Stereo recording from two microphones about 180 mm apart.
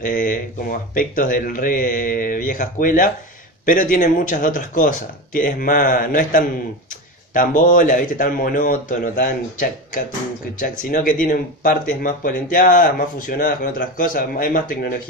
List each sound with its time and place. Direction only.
0.0 s speech: 50° left (ahead or behind)